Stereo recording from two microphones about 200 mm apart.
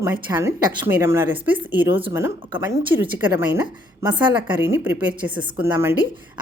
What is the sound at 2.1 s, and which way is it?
Speech, 15° right (ahead or behind).